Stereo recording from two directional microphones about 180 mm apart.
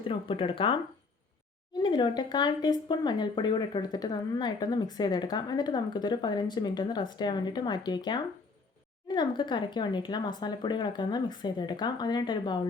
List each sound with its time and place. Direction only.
0.1 s speech: 30° left (ahead or behind)
1.8 s speech: 25° left (ahead or behind)